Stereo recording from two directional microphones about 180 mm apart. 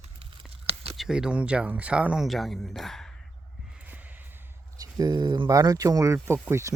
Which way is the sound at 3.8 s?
10° right (ahead or behind).